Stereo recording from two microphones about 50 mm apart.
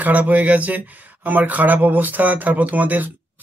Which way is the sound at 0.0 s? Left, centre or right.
Right.